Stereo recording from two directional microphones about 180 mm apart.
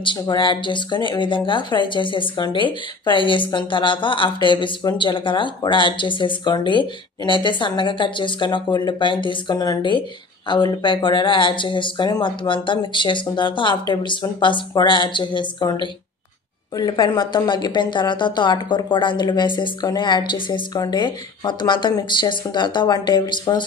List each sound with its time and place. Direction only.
0.0 s speech: 25° left (ahead or behind)